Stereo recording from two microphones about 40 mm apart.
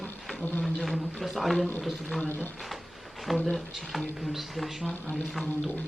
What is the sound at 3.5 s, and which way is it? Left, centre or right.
Speech, centre.